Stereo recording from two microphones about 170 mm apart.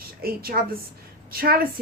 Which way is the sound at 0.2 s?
60° right (ahead or behind).